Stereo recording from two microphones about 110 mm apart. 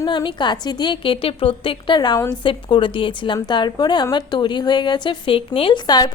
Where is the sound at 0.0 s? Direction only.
45° left (ahead or behind).